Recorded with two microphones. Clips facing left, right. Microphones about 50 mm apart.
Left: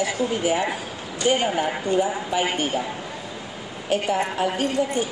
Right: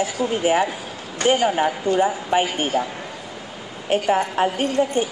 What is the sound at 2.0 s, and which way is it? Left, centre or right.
Speech, right.